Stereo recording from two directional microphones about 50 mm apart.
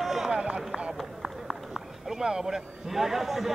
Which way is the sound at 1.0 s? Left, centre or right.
Centre.